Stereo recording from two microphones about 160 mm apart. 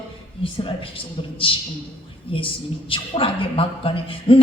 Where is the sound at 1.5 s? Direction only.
35° left (ahead or behind).